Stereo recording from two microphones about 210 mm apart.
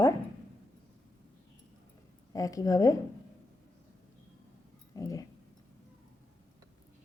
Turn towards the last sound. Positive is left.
turn(degrees=15)  # may be behind; listen again after turning